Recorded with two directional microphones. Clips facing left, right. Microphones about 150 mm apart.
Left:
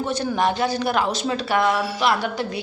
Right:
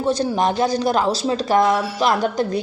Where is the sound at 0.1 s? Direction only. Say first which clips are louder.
Right 4 dB; 35° right (ahead or behind).